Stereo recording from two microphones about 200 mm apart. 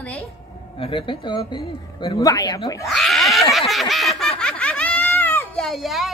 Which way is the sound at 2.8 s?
Centre (ahead or behind).